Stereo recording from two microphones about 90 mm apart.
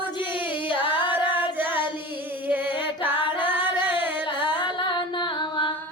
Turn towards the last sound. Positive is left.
turn(degrees=65)  # may be behind; listen again after turning